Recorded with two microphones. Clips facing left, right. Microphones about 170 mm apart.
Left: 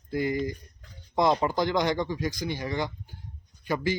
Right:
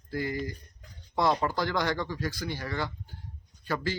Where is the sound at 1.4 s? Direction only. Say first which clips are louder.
Left 3 dB; 15° left (ahead or behind).